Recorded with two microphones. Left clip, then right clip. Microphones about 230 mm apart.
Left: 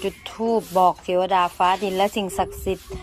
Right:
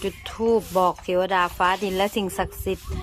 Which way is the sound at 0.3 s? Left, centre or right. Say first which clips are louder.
Left 1 dB; right.